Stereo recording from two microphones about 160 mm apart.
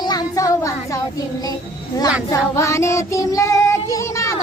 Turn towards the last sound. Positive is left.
turn(degrees=20)  # may be behind; listen again after turning